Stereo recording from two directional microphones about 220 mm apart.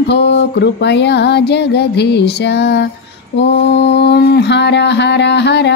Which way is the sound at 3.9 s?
50° left (ahead or behind).